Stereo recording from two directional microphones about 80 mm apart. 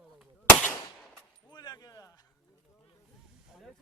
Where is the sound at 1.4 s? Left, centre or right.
Left.